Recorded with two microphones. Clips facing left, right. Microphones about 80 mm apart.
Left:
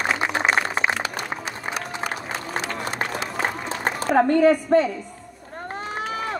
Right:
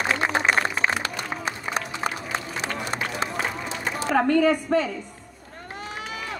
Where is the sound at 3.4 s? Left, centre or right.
Left.